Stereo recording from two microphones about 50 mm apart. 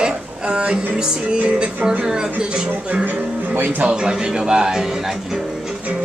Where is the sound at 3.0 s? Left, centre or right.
Right.